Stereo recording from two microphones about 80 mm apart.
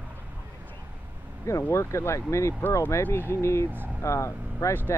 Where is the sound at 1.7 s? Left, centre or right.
Left.